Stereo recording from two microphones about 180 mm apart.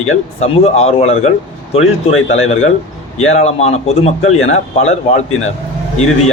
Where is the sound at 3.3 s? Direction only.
35° left (ahead or behind).